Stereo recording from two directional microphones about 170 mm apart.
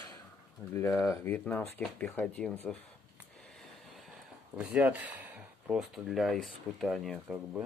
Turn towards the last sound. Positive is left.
turn(degrees=0)  # may be behind; listen again after turning